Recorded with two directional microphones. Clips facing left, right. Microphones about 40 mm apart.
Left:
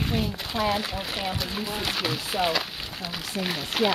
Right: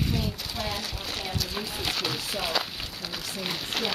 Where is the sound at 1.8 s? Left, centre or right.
Centre.